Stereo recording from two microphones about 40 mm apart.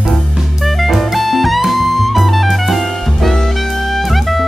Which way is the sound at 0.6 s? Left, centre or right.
Centre.